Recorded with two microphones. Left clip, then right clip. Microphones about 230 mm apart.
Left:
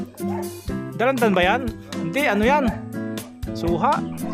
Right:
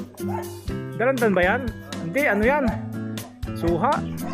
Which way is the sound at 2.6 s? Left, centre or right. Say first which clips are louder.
Left 1 dB; centre.